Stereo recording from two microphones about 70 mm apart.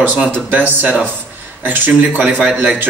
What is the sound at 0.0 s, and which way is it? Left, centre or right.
Speech, right.